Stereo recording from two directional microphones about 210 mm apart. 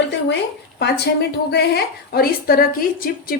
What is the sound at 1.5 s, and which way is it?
A woman's voice, 50° left (ahead or behind).